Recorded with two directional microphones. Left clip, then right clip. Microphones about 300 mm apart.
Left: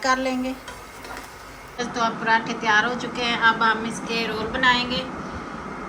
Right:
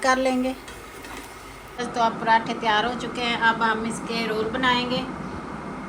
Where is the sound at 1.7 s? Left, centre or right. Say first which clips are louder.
Right 1 dB; centre.